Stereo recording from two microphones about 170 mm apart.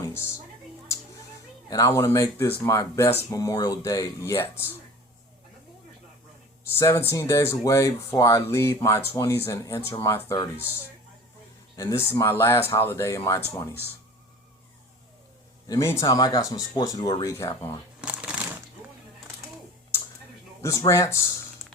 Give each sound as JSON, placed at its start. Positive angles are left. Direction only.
{"t": 0.0, "sound": "music", "side_deg": 15}
{"t": 1.7, "sound": "speech", "side_deg": 20}
{"t": 6.7, "sound": "speech", "side_deg": 15}
{"t": 11.8, "sound": "speech", "side_deg": 15}
{"t": 15.6, "sound": "speech", "side_deg": 20}
{"t": 18.0, "sound": "shuffling cards", "side_deg": -5}
{"t": 20.6, "sound": "speech", "side_deg": 20}